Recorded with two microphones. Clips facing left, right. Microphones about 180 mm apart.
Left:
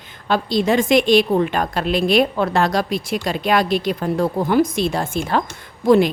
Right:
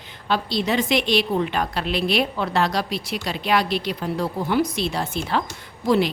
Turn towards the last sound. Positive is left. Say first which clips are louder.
# left 6 dB
turn(degrees=50)  # may be behind; listen again after turning